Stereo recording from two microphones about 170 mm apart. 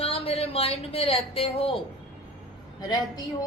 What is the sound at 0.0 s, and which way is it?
Speech, 35° left (ahead or behind).